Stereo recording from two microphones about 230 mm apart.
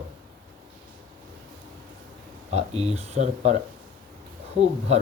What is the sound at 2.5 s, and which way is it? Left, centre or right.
Speech, right.